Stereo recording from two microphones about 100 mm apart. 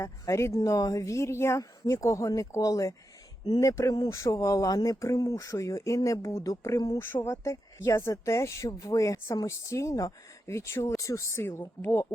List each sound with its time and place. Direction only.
0.0 s speech: 30° left (ahead or behind)
7.1 s speech: 25° left (ahead or behind)